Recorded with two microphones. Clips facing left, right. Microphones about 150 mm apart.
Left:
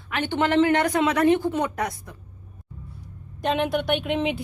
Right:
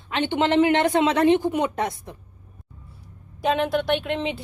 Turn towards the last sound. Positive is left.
turn(degrees=5)  # may be behind; listen again after turning